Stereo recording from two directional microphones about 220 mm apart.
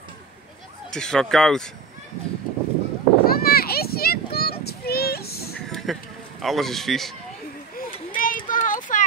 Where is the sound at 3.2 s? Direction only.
45° left (ahead or behind).